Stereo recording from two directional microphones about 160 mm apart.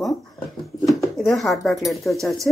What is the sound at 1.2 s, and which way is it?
A woman's voice, centre (ahead or behind).